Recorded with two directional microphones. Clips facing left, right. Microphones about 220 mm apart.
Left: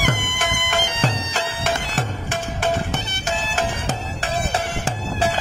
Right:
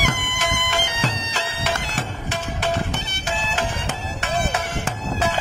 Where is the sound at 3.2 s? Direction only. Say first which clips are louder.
Left 1 dB; 45° left (ahead or behind).